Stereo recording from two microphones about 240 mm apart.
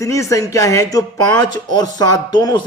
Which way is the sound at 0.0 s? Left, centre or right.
Centre.